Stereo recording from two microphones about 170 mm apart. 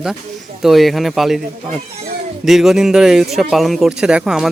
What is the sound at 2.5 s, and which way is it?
Speech, centre (ahead or behind).